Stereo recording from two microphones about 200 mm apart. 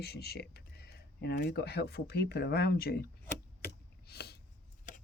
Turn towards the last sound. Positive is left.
turn(degrees=55)  # may be behind; listen again after turning